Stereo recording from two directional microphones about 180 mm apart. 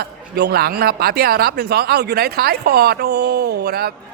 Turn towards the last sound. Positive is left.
turn(degrees=-60)  # may be behind; listen again after turning